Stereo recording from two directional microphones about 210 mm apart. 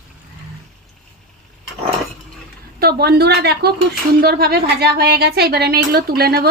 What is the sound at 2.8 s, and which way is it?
Speech, 50° right (ahead or behind).